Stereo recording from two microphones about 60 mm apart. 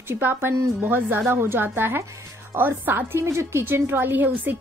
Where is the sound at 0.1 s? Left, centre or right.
Right.